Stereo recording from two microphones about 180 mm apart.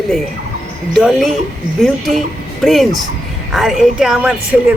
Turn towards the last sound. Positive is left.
turn(degrees=-5)  # may be behind; listen again after turning